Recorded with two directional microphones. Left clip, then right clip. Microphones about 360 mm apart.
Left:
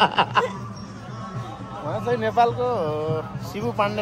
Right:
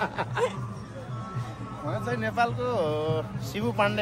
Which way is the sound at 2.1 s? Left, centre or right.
Centre.